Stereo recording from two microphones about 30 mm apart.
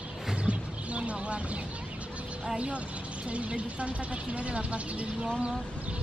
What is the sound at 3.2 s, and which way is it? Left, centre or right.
Speech, right.